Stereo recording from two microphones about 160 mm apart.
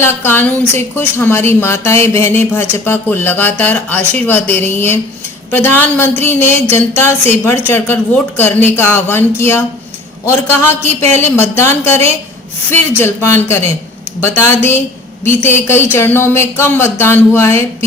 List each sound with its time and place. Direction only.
0.0 s a woman's voice: 15° left (ahead or behind)